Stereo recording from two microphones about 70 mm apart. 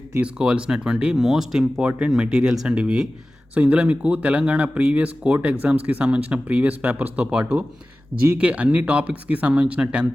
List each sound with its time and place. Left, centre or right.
0.2 s speech: centre